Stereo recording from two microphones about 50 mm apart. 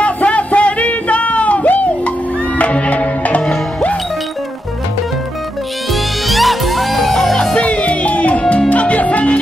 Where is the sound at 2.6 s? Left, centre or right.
Left.